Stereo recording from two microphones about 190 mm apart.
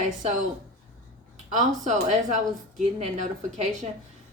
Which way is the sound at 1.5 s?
40° right (ahead or behind).